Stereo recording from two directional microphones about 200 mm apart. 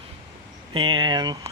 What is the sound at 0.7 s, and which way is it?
Speech, 25° right (ahead or behind).